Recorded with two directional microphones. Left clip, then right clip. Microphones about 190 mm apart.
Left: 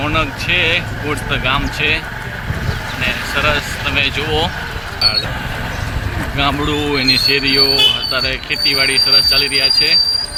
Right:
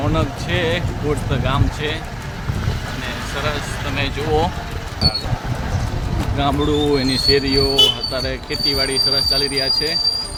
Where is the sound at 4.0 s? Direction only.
15° right (ahead or behind).